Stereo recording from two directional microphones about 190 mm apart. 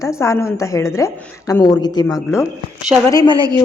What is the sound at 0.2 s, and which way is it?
A woman's voice, 15° left (ahead or behind).